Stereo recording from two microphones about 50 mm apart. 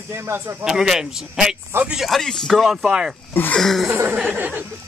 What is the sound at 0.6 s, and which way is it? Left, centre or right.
Speech, centre.